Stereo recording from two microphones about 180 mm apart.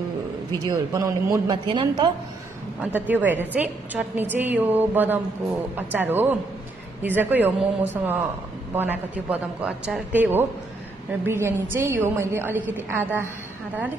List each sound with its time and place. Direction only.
0.7 s a woman's voice: 15° right (ahead or behind)
1.7 s a woman's voice: 25° right (ahead or behind)
2.8 s a woman's voice: 10° right (ahead or behind)